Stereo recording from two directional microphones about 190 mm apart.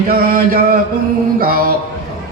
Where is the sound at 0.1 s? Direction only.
50° right (ahead or behind).